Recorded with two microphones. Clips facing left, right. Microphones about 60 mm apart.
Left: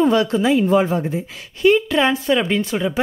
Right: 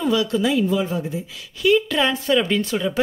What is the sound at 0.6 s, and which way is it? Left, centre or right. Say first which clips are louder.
A woman's voice: left 5 dB; left.